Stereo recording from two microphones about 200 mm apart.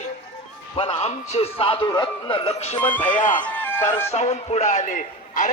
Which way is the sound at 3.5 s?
10° left (ahead or behind).